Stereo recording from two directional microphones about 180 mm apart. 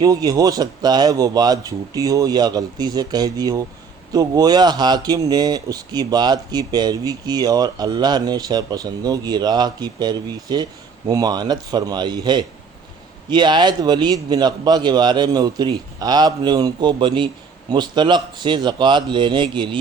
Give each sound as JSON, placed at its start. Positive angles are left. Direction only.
{"t": 0.0, "sound": "speech", "side_deg": -20}